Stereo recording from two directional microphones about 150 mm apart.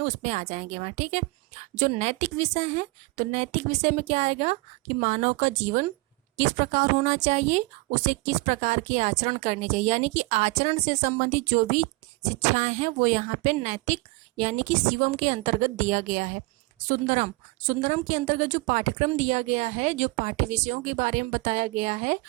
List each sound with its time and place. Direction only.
0.0 s a woman's voice: 50° right (ahead or behind)